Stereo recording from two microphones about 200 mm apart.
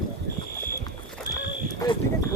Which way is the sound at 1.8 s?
20° left (ahead or behind).